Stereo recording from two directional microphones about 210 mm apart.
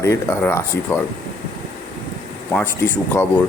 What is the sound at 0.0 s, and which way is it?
Speech, 15° left (ahead or behind).